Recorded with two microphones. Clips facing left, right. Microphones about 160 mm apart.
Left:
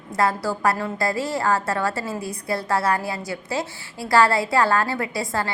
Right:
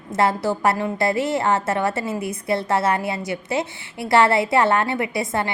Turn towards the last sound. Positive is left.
turn(degrees=-20)  # may be behind; listen again after turning